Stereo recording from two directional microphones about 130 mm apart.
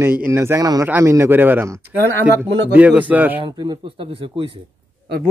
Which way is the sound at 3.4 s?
35° right (ahead or behind).